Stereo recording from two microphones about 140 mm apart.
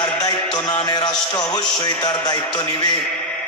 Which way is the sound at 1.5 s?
30° left (ahead or behind).